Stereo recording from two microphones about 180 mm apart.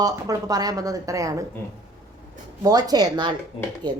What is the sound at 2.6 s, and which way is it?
A woman's voice, 20° right (ahead or behind).